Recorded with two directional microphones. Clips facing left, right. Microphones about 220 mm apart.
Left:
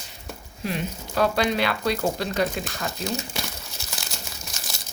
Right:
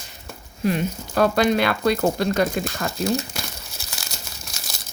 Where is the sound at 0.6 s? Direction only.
50° right (ahead or behind).